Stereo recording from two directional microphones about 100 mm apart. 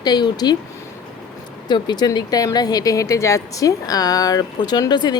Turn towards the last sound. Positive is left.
turn(degrees=45)  # may be behind; listen again after turning